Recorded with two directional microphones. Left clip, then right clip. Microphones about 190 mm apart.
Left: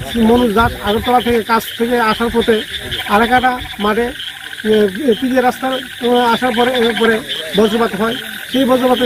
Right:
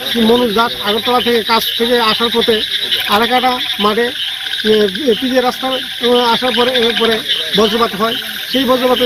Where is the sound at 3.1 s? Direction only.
20° left (ahead or behind).